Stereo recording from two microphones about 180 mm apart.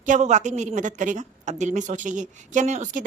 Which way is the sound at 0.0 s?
40° right (ahead or behind).